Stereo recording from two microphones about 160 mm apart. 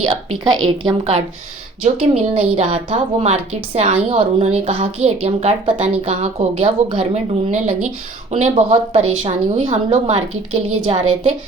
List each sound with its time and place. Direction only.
0.5 s a woman's voice: 35° right (ahead or behind)
8.7 s a woman's voice: 35° right (ahead or behind)